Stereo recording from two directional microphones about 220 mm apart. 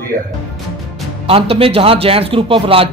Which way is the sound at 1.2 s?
25° right (ahead or behind).